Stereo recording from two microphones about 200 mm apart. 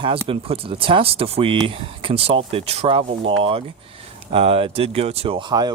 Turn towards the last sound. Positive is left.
turn(degrees=-20)  # may be behind; listen again after turning